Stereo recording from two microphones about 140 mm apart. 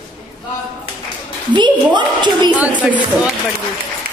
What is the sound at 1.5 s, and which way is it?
A woman's voice, 35° right (ahead or behind).